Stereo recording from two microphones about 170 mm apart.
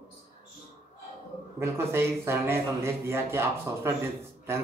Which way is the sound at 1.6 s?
15° right (ahead or behind).